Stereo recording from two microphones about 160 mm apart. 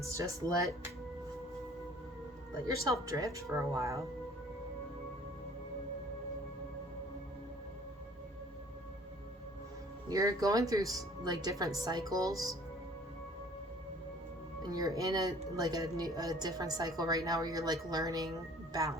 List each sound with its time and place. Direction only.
0.1 s speech: 20° right (ahead or behind)
2.6 s speech: 20° right (ahead or behind)
10.1 s speech: 20° right (ahead or behind)
14.6 s speech: 25° right (ahead or behind)